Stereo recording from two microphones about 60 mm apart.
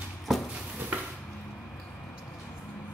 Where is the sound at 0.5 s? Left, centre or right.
Right.